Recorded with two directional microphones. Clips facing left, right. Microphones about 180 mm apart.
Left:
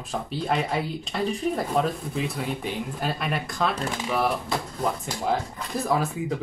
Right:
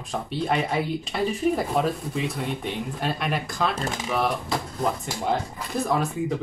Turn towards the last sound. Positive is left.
turn(degrees=0)  # may be behind; listen again after turning